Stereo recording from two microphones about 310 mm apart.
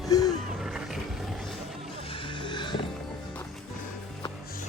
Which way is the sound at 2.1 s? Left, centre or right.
Centre.